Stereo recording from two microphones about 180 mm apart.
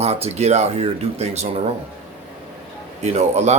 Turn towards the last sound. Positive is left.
turn(degrees=-40)  # may be behind; listen again after turning